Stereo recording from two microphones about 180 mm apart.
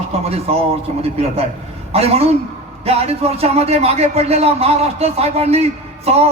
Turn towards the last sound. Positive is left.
turn(degrees=-35)  # may be behind; listen again after turning